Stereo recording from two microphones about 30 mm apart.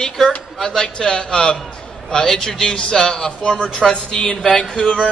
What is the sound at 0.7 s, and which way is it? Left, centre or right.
A man's voice, left.